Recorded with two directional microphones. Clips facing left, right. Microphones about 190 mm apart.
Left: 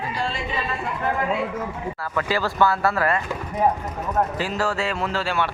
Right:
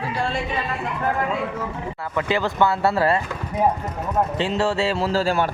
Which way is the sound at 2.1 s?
20° right (ahead or behind).